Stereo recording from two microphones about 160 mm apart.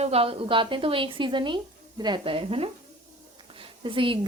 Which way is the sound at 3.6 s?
30° right (ahead or behind).